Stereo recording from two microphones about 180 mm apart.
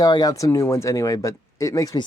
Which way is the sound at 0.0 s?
20° left (ahead or behind).